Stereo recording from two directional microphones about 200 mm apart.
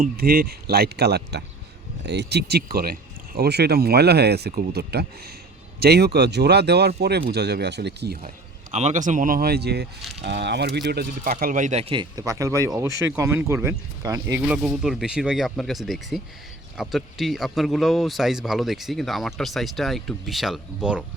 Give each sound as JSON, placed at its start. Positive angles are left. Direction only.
{"t": 0.0, "sound": "speech", "side_deg": -50}
{"t": 8.7, "sound": "speech", "side_deg": -35}
{"t": 14.4, "sound": "speech", "side_deg": -5}